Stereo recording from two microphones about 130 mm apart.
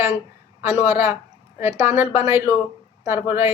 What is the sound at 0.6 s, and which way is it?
A woman's voice, 15° right (ahead or behind).